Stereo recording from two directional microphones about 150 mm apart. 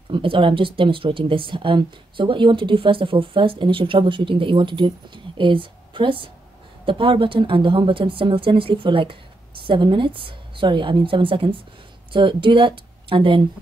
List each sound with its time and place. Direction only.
0.1 s speech: 35° right (ahead or behind)